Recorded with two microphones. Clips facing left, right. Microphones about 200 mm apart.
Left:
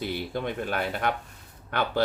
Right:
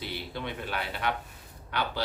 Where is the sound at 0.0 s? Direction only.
50° left (ahead or behind).